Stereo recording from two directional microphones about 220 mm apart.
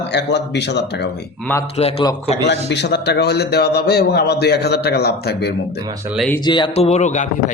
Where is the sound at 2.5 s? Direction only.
50° left (ahead or behind).